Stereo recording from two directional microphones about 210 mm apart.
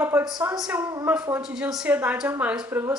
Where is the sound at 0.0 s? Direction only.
10° right (ahead or behind).